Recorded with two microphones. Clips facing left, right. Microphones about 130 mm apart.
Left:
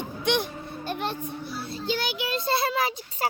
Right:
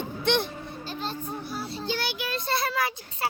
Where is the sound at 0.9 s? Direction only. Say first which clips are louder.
Left 5 dB; 65° left (ahead or behind).